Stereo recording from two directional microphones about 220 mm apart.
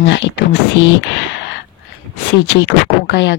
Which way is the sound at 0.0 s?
50° left (ahead or behind).